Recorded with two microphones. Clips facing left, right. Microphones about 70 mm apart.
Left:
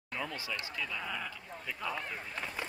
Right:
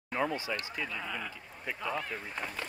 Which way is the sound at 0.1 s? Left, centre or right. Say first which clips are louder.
Right 6 dB; right.